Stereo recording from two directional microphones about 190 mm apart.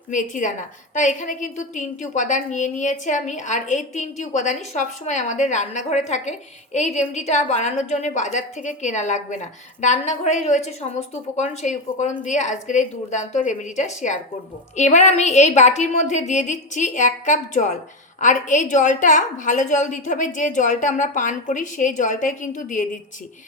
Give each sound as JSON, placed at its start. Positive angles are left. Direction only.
{"t": 0.1, "sound": "a woman's voice", "side_deg": 40}